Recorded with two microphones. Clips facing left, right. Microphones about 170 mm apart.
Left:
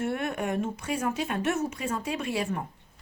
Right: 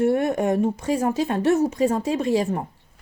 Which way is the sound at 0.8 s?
35° right (ahead or behind).